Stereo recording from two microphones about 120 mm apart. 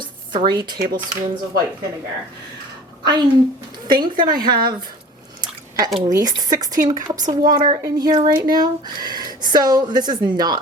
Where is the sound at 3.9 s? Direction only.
35° right (ahead or behind).